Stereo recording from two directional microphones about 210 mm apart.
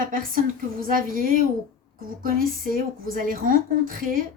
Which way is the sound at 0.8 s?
40° right (ahead or behind).